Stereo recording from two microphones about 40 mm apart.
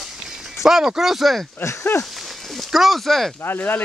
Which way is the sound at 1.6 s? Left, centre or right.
Left.